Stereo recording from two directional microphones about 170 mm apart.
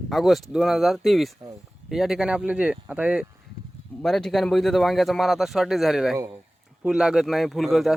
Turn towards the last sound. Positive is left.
turn(degrees=0)  # may be behind; listen again after turning